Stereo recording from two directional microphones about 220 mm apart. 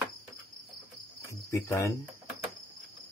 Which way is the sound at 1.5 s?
15° left (ahead or behind).